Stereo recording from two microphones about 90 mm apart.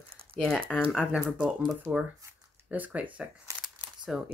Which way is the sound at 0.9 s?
10° right (ahead or behind).